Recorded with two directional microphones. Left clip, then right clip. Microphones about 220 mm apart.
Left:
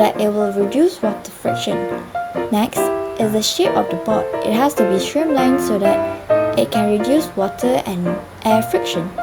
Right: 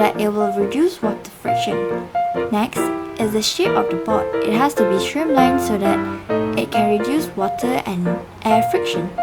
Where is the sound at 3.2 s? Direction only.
Centre (ahead or behind).